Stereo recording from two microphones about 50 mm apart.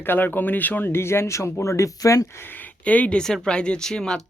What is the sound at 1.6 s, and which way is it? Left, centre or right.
Speech, left.